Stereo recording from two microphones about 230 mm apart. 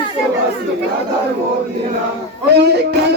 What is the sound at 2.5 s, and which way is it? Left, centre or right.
Speech, right.